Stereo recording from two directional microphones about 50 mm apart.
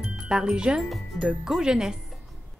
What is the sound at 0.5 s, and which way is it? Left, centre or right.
Speech, centre.